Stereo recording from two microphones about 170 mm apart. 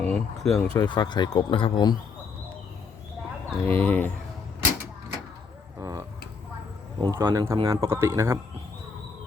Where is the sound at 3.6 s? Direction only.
10° left (ahead or behind).